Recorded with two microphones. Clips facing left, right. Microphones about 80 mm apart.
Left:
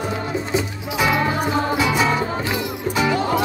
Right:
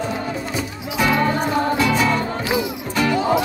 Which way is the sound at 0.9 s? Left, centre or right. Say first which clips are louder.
Right 1 dB; centre.